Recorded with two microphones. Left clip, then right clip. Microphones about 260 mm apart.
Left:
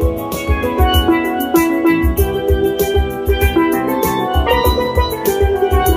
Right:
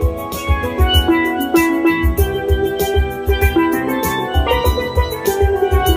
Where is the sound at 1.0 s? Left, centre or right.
Centre.